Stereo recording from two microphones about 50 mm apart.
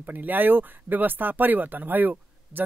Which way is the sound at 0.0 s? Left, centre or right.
Right.